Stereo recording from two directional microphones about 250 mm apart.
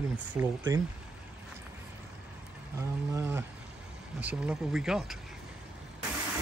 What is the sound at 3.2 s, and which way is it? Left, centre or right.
Speech, centre.